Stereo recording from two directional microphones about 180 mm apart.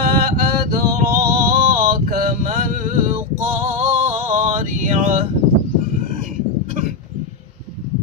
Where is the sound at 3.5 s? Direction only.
40° right (ahead or behind).